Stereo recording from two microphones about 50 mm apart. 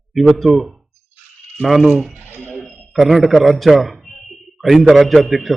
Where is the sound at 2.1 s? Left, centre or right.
Right.